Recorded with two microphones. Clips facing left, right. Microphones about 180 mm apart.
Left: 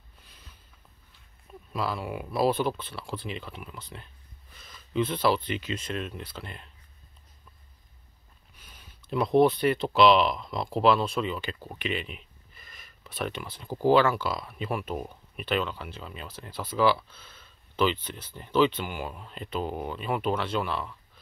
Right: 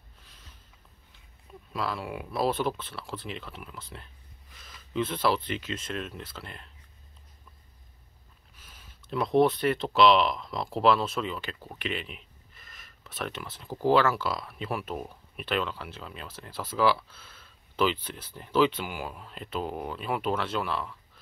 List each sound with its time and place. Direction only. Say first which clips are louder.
0.2 s a sound: left 1 dB; centre (ahead or behind)
1.7 s speech: left 1 dB; centre (ahead or behind)
8.5 s speech: left 1 dB; 5° right (ahead or behind)